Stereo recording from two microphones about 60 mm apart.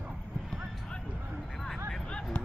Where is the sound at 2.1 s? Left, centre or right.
Centre.